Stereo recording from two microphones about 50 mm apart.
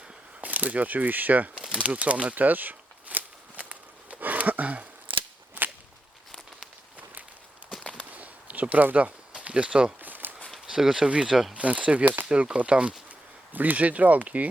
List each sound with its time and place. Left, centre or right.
0.4 s speech: right
1.5 s crumpling: centre
1.8 s a sound: right
5.6 s whip: right
8.1 s a sound: right
10.0 s a sound: right
10.7 s speech: centre
11.5 s speech: right
13.1 s speech: right